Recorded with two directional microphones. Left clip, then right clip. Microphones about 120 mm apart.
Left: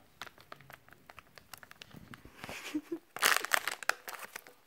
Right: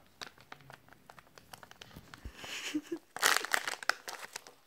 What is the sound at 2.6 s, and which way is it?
Crumpling, 20° left (ahead or behind).